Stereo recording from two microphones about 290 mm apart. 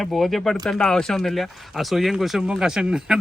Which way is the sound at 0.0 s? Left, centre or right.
Centre.